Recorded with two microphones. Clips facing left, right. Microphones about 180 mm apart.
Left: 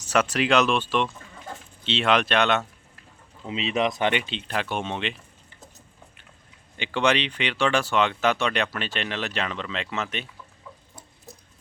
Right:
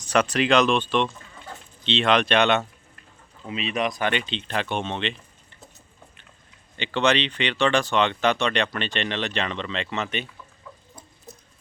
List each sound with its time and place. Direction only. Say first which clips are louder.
0.0 s speech: right 1 dB; 5° left (ahead or behind)
3.4 s speech: left 2 dB; 25° left (ahead or behind)
4.2 s speech: right 1 dB; 10° left (ahead or behind)
6.7 s speech: right 1 dB; 10° left (ahead or behind)